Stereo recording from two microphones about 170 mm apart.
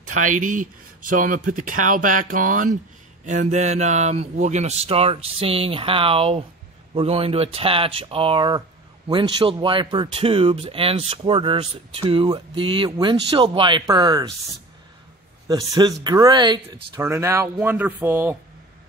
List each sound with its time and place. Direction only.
0.1 s speech: 50° right (ahead or behind); by 14.2 s 25° right (ahead or behind)
15.4 s speech: 20° right (ahead or behind)